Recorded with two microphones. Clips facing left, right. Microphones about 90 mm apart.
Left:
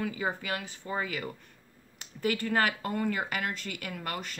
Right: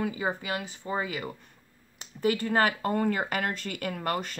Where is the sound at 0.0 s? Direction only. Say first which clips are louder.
Right 2 dB; 20° right (ahead or behind).